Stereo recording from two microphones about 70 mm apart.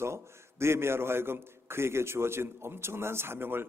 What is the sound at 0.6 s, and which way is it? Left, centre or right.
A man's voice, right.